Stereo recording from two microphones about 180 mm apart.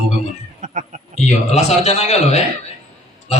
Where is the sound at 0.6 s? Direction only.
45° right (ahead or behind).